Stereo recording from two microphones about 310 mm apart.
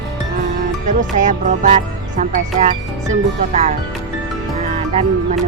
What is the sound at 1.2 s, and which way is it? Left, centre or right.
Speech, right.